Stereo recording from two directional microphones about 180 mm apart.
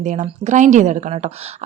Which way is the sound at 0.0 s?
40° right (ahead or behind).